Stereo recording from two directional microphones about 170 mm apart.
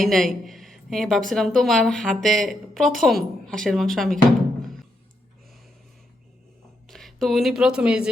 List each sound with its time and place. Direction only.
0.0 s a woman's voice: centre (ahead or behind)
6.8 s speech: centre (ahead or behind)